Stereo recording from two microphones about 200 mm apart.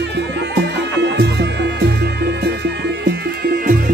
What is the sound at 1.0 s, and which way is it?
Music, 60° right (ahead or behind).